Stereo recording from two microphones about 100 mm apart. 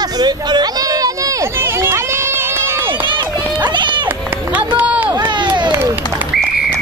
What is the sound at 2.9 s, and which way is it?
Run, 55° right (ahead or behind).